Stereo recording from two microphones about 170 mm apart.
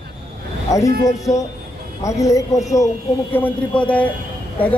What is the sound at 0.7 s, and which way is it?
Speech, 20° left (ahead or behind).